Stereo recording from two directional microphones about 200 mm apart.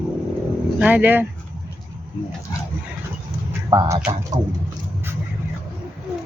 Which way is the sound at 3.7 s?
20° right (ahead or behind).